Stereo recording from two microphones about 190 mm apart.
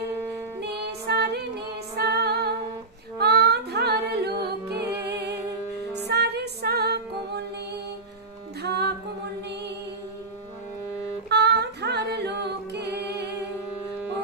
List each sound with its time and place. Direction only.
1.0 s female singing: 60° right (ahead or behind)
2.0 s music: 60° right (ahead or behind)
3.2 s female singing: 60° right (ahead or behind)
6.1 s music: 60° right (ahead or behind)
8.6 s music: 60° right (ahead or behind)
11.3 s a capella: 60° right (ahead or behind)